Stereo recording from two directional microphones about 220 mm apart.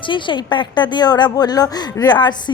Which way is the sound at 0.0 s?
20° left (ahead or behind).